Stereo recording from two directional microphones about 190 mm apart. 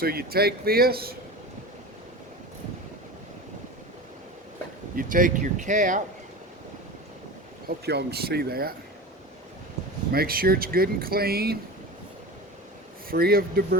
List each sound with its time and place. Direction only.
0.0 s speech: 55° right (ahead or behind)
4.9 s speech: 45° right (ahead or behind)
7.9 s speech: 60° right (ahead or behind)
10.1 s speech: 50° right (ahead or behind)
13.1 s speech: 50° right (ahead or behind)